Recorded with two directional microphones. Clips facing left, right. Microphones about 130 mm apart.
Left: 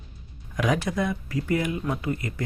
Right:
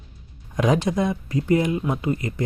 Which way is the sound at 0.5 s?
25° right (ahead or behind).